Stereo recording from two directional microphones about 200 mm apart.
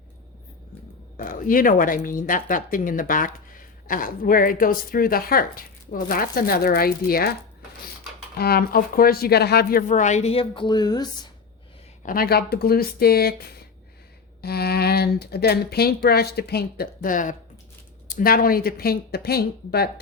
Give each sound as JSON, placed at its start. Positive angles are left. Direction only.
{"t": 1.1, "sound": "speech", "side_deg": 45}
{"t": 8.4, "sound": "speech", "side_deg": 50}
{"t": 12.0, "sound": "speech", "side_deg": 50}